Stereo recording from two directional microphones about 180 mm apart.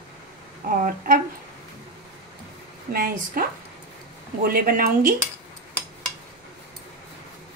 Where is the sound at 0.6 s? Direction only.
50° right (ahead or behind).